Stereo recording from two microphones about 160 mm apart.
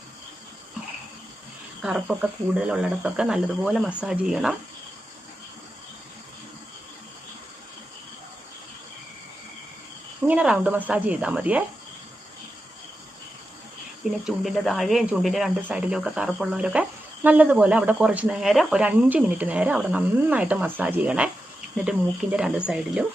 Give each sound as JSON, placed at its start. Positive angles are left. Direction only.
{"t": 1.8, "sound": "speech", "side_deg": -5}
{"t": 10.2, "sound": "speech", "side_deg": -10}
{"t": 14.0, "sound": "speech", "side_deg": 0}